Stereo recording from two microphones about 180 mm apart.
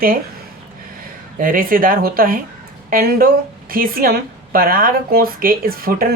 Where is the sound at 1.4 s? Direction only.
50° right (ahead or behind).